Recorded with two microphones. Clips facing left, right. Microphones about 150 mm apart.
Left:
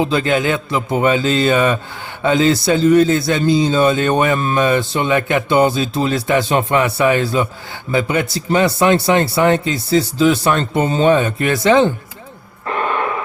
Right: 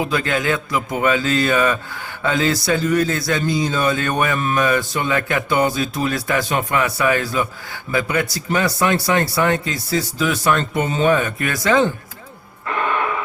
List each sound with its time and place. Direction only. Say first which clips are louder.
0.0 s a man's voice: left 5 dB; 25° left (ahead or behind)